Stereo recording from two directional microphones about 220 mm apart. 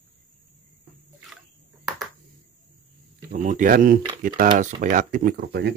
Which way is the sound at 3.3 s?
35° right (ahead or behind).